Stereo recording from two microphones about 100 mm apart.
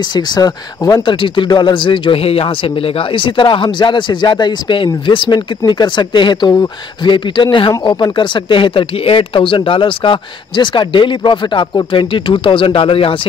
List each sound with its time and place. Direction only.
0.1 s speech: 40° left (ahead or behind)
1.2 s speech: 55° left (ahead or behind)